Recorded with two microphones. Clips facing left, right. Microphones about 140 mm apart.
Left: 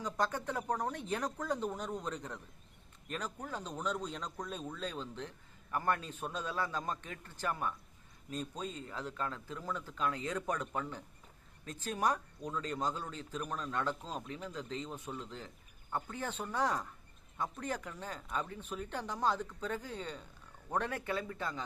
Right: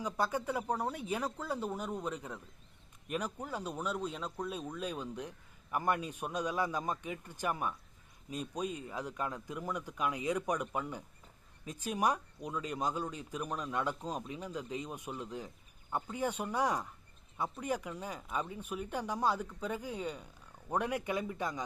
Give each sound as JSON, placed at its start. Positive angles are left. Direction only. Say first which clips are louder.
{"t": 0.0, "sound": "speech", "louder": "right 1 dB", "side_deg": -10}